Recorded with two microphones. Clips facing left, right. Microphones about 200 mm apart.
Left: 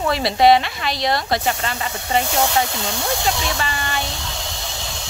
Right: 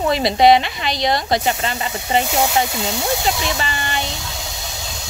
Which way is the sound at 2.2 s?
10° right (ahead or behind).